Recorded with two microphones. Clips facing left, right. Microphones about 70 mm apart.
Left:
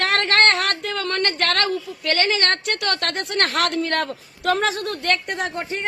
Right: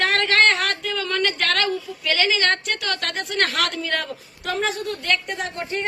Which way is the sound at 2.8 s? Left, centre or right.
Left.